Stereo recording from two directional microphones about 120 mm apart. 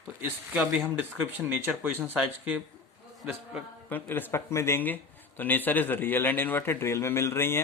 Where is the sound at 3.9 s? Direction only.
15° left (ahead or behind).